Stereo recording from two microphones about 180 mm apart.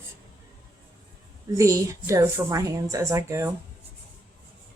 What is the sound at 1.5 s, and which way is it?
A woman's voice, 20° right (ahead or behind).